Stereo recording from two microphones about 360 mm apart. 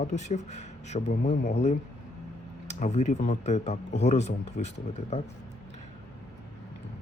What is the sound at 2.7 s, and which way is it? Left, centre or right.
Speech, centre.